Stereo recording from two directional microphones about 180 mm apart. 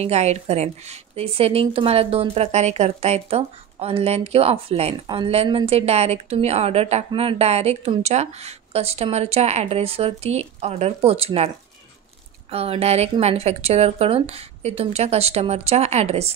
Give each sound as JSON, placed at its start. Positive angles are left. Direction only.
{"t": 0.0, "sound": "speech", "side_deg": -35}